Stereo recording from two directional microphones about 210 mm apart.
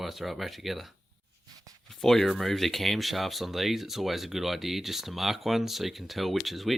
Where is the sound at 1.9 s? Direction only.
Centre (ahead or behind).